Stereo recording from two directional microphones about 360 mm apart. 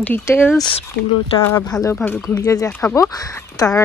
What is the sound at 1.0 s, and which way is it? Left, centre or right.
Speech, left.